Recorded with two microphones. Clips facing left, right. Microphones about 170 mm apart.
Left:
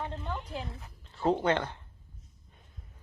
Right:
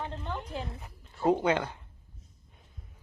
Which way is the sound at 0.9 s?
10° right (ahead or behind).